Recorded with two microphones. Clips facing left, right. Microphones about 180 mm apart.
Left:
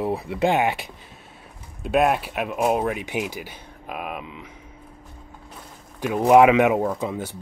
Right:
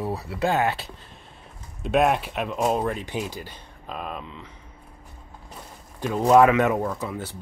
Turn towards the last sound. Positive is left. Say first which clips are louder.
# left 4 dB
turn(degrees=15)  # may be behind; listen again after turning